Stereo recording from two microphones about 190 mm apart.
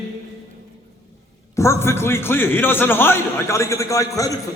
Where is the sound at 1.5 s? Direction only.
15° left (ahead or behind).